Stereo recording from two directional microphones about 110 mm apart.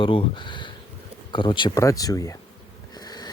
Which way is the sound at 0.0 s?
50° left (ahead or behind).